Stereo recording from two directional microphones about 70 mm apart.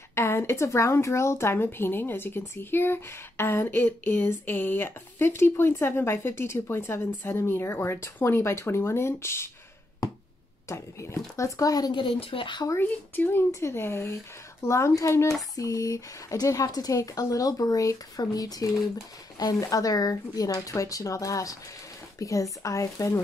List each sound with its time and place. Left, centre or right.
0.1 s a sound: left
0.7 s a woman's voice: left
10.7 s speech: left
12.8 s speech: left
13.5 s a woman's voice: left